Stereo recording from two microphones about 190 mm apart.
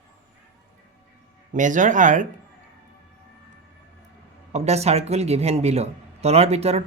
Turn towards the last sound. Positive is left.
turn(degrees=-35)  # may be behind; listen again after turning